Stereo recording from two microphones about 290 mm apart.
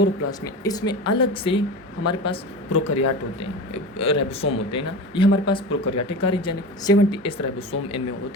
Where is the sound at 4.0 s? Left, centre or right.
Centre.